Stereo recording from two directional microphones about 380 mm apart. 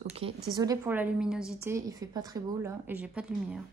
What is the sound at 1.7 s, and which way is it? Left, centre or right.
A woman's voice, centre.